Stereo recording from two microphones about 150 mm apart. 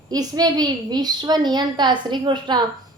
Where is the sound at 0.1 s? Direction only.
25° right (ahead or behind).